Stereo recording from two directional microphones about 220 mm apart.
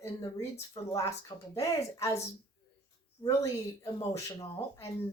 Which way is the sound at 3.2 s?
15° left (ahead or behind).